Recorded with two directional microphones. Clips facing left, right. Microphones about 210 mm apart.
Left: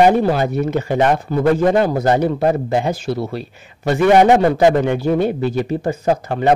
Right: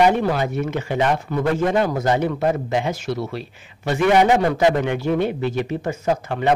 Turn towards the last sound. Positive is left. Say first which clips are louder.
# left 4 dB
turn(degrees=40)  # may be behind; listen again after turning